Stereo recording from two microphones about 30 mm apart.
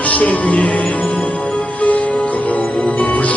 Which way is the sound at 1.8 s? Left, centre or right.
Left.